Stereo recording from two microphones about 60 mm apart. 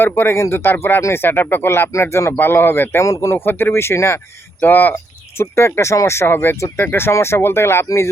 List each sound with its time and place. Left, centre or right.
0.0 s speech: left
1.9 s speech: left
3.0 s speech: left
4.6 s speech: left
5.4 s speech: left